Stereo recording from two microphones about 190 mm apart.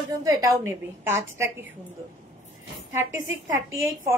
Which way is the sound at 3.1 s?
90° right.